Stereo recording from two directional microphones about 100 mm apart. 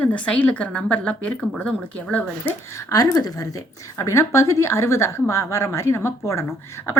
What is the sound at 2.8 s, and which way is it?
A woman's voice, 35° left (ahead or behind).